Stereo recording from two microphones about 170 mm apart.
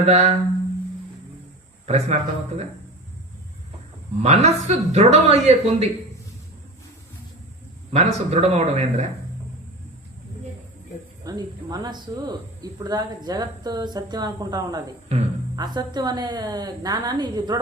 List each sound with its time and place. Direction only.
0.0 s a man's voice: 40° right (ahead or behind)
1.9 s a man's voice: 40° right (ahead or behind)
4.2 s a man's voice: 40° right (ahead or behind)
7.9 s a man's voice: 40° right (ahead or behind)
11.2 s speech: 20° right (ahead or behind)
15.1 s a man's voice: 40° right (ahead or behind)
15.5 s speech: 25° right (ahead or behind)